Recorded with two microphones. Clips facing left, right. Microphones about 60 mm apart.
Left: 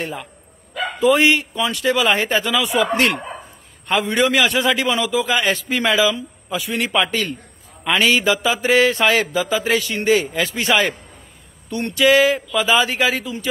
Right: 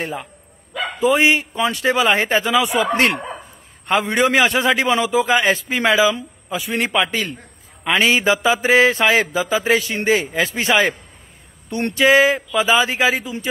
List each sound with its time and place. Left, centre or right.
0.0 s a man's voice: centre
3.8 s a man's voice: right
13.1 s speech: centre